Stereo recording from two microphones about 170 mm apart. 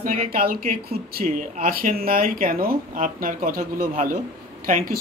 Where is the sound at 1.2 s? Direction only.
55° right (ahead or behind).